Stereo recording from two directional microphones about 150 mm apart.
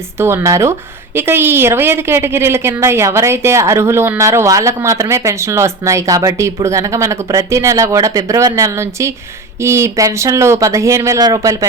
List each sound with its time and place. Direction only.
0.2 s a woman's voice: 15° right (ahead or behind)